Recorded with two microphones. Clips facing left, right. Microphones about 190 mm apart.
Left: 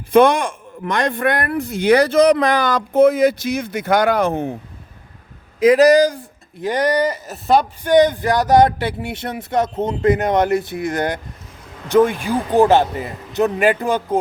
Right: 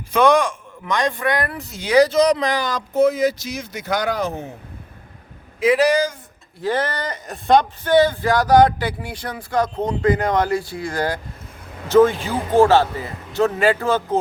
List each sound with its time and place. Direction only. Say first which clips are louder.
0.1 s speech: left 3 dB; 55° left (ahead or behind)
5.5 s speech: left 5 dB; 40° left (ahead or behind)
6.6 s speech: left 5 dB; 15° left (ahead or behind)